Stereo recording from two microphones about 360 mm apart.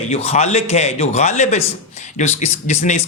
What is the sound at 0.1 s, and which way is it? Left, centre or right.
A man's voice, centre.